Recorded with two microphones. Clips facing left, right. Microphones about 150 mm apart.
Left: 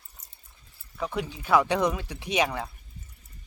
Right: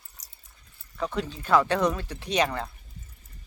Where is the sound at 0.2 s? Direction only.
90° right.